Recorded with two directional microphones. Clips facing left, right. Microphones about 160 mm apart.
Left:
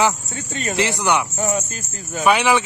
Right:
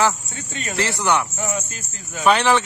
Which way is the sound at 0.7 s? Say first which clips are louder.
Left 1 dB; 15° left (ahead or behind).